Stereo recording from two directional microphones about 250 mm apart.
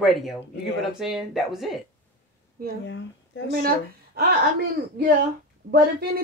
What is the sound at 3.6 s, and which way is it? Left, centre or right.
Speech, right.